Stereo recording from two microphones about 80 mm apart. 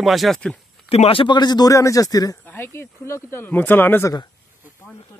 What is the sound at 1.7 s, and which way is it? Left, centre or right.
Speech, left.